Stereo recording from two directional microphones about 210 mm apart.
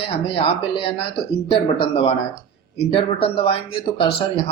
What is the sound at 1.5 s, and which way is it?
Speech, 25° left (ahead or behind).